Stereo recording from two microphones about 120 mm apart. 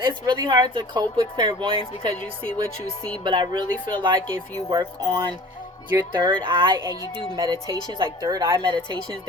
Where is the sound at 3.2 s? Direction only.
40° right (ahead or behind).